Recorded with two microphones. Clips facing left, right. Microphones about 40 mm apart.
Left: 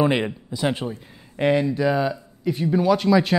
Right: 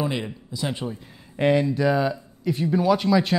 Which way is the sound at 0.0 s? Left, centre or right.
Left.